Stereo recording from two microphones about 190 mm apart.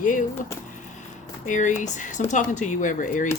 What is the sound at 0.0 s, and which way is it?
Speech, 45° left (ahead or behind).